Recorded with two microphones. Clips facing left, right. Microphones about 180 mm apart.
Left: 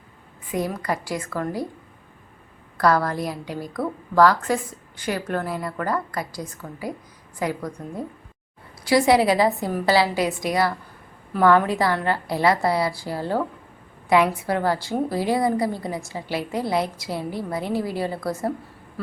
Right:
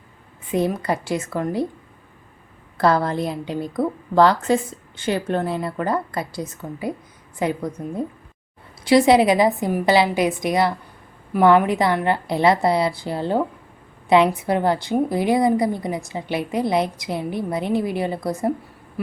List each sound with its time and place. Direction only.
0.5 s a woman's voice: 25° right (ahead or behind)
2.7 s a woman's voice: 25° right (ahead or behind)